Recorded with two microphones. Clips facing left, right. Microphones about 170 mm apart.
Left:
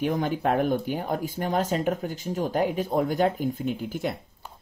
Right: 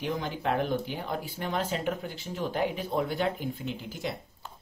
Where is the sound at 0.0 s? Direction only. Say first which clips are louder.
Left 6 dB; 50° left (ahead or behind).